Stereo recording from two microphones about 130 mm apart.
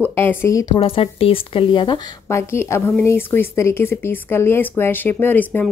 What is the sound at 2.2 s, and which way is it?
Speech, 20° left (ahead or behind).